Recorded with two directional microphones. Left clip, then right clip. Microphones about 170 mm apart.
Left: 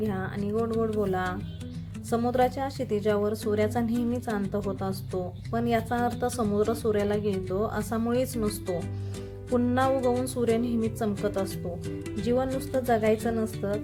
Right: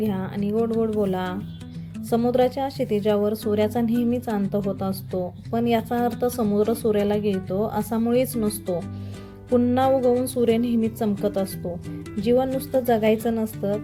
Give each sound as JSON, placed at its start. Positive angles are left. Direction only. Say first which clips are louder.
{"t": 0.0, "sound": "speech", "louder": "right 4 dB", "side_deg": -15}